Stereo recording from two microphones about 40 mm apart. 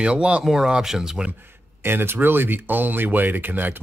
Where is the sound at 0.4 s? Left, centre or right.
Centre.